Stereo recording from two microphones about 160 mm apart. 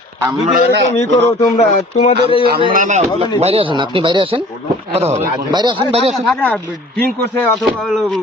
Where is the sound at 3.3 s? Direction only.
35° right (ahead or behind).